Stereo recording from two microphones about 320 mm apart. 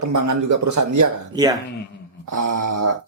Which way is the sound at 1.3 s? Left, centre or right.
Centre.